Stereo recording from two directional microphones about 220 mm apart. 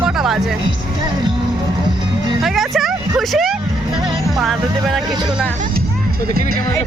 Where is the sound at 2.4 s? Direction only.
Centre (ahead or behind).